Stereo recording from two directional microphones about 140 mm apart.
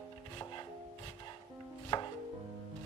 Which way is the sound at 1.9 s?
35° left (ahead or behind).